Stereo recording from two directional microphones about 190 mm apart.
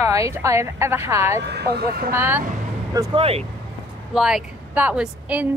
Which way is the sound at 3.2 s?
30° right (ahead or behind).